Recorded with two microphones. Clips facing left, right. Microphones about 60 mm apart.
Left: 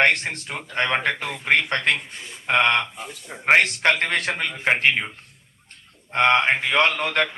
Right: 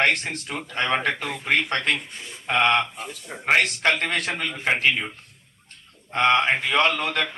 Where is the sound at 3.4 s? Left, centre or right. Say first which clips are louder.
Left 3 dB; left.